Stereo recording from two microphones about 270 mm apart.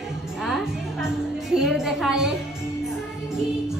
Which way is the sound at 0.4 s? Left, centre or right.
Centre.